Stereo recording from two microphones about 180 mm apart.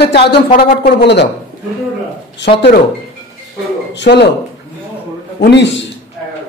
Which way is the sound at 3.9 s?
70° left (ahead or behind).